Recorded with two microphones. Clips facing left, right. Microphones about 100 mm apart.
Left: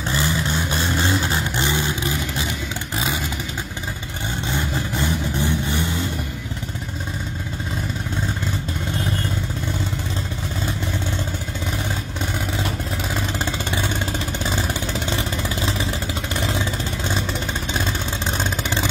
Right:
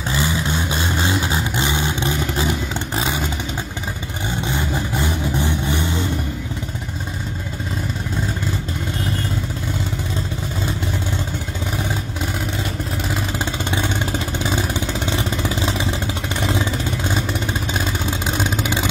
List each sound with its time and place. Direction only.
0.1 s vehicle: 15° right (ahead or behind)
2.0 s vehicle: 35° right (ahead or behind)
5.4 s vehicle: 15° right (ahead or behind)
14.4 s vehicle: 15° right (ahead or behind)
18.4 s vehicle: 10° right (ahead or behind)